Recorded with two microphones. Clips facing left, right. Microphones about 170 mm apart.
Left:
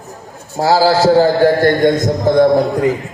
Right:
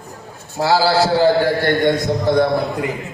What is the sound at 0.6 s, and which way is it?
A man's voice, 45° left (ahead or behind).